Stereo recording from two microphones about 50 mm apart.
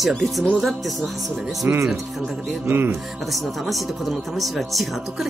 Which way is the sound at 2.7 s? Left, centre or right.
Right.